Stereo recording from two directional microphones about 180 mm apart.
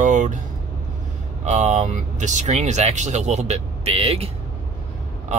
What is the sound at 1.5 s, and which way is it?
Speech, 40° right (ahead or behind).